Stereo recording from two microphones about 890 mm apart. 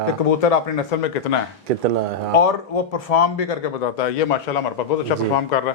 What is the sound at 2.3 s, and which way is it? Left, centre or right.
A man's voice, left.